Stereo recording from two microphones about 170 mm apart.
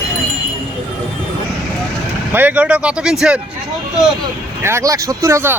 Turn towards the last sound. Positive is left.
turn(degrees=-15)  # may be behind; listen again after turning